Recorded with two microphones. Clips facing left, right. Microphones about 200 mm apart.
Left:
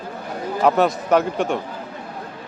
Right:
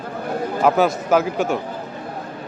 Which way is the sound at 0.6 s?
Centre (ahead or behind).